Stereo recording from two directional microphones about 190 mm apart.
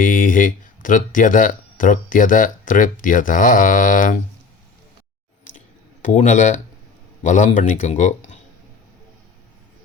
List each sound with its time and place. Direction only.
0.0 s speech: 45° left (ahead or behind)
5.5 s a sound: 40° left (ahead or behind)
7.3 s speech: 40° left (ahead or behind)